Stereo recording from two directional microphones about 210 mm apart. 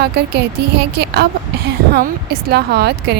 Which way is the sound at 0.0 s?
50° right (ahead or behind).